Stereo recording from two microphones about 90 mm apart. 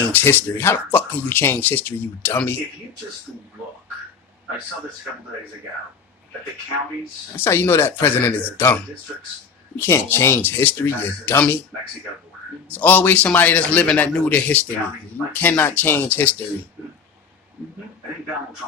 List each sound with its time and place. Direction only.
0.1 s speech: 20° left (ahead or behind)
7.3 s speech: 25° left (ahead or behind)
12.6 s a man's voice: 20° left (ahead or behind)